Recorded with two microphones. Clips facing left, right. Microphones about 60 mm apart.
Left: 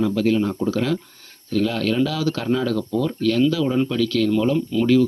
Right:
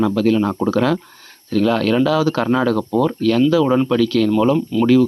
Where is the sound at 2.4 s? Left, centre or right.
Right.